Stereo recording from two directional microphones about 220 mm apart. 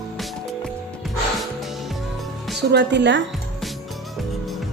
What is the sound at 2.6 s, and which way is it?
Speech, 50° right (ahead or behind).